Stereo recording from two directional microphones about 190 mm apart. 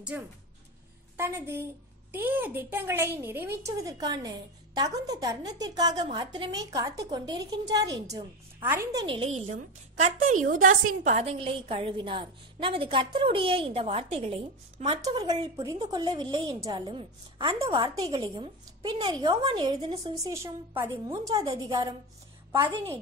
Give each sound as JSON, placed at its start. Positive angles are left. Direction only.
{"t": 0.1, "sound": "a woman's voice", "side_deg": -10}
{"t": 9.0, "sound": "a woman's voice", "side_deg": -30}
{"t": 15.0, "sound": "a woman's voice", "side_deg": -20}